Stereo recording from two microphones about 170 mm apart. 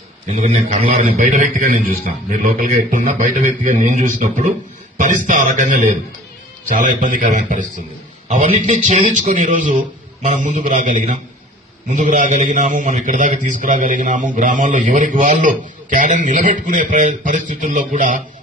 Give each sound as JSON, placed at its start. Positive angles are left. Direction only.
{"t": 0.3, "sound": "a man's voice", "side_deg": -45}